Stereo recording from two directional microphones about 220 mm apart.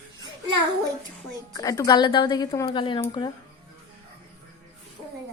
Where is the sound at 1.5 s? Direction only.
15° left (ahead or behind).